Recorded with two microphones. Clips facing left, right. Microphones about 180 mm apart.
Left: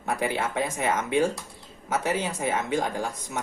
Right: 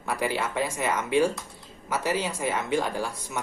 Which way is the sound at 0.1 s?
20° left (ahead or behind).